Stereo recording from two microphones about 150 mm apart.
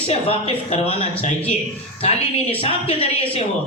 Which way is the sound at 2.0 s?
45° left (ahead or behind).